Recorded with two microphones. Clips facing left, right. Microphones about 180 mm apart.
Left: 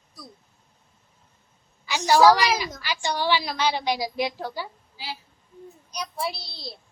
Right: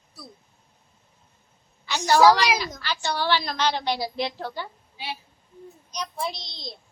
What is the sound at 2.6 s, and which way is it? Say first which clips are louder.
A woman's voice: even; 10° left (ahead or behind).